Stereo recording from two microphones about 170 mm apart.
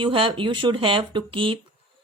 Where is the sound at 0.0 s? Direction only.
30° right (ahead or behind).